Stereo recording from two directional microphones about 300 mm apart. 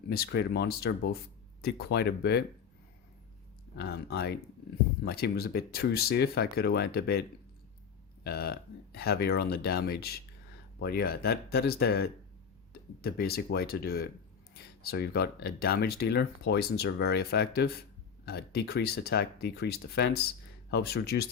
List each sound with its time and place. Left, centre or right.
0.1 s speech: left
3.8 s speech: left